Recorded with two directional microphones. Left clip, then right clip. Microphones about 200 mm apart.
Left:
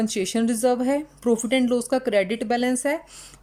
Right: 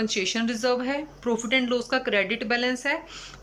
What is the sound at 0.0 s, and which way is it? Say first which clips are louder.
A woman's voice: left 1 dB; 30° left (ahead or behind).